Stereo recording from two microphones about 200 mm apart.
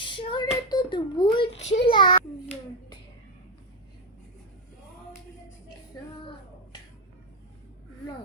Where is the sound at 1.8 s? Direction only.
25° left (ahead or behind).